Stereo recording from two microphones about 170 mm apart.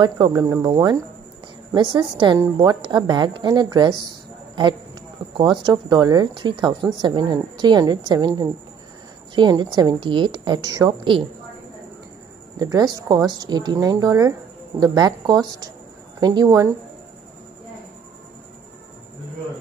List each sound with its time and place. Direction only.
0.0 s speech: 25° right (ahead or behind)
5.4 s speech: 25° right (ahead or behind)
12.5 s speech: 25° right (ahead or behind)